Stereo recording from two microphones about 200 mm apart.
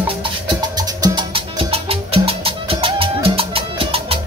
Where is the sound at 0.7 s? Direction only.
20° right (ahead or behind).